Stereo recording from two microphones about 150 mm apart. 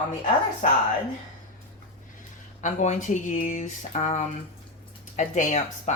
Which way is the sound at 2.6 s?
55° left (ahead or behind).